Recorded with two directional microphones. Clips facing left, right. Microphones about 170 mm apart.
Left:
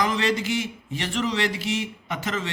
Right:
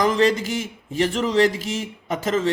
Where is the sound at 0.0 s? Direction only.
45° right (ahead or behind).